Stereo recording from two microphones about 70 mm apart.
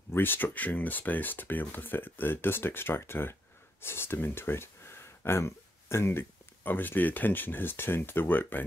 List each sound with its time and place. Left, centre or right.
0.1 s speech: left